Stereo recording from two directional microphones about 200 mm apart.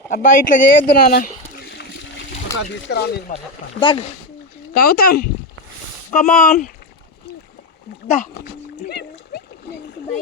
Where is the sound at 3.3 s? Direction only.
25° left (ahead or behind).